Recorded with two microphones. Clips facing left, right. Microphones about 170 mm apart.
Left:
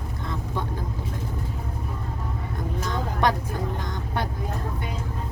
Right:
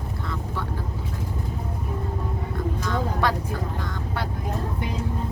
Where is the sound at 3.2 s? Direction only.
20° left (ahead or behind).